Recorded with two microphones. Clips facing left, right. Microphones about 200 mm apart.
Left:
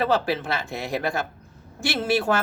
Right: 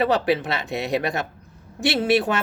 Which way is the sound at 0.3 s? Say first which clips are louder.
Right 4 dB; 20° right (ahead or behind).